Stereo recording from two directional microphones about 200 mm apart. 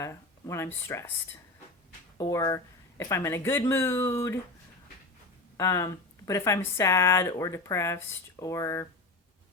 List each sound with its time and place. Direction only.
0.0 s speech: 15° left (ahead or behind)
5.5 s speech: 15° left (ahead or behind)